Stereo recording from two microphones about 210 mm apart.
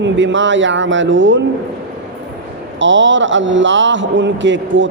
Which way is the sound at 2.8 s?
60° right (ahead or behind).